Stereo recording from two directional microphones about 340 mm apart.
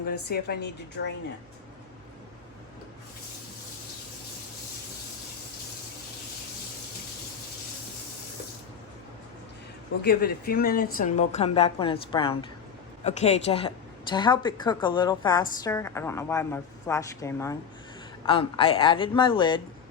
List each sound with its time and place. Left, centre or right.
0.3 s speech: left
10.0 s a woman's voice: left